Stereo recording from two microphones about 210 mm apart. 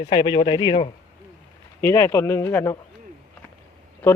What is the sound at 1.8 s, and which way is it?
Speech, 10° left (ahead or behind).